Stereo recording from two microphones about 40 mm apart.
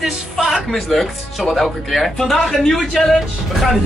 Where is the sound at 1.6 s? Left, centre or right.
Centre.